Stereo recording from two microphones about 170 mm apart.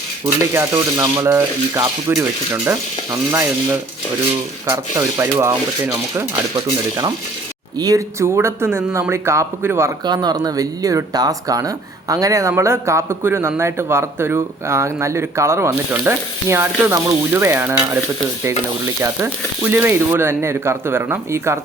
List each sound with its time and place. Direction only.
0.5 s speech: 15° right (ahead or behind)
7.8 s speech: 20° right (ahead or behind)
19.0 s speech: 15° right (ahead or behind)